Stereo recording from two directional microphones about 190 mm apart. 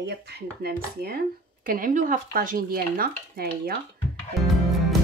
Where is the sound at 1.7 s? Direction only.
45° right (ahead or behind).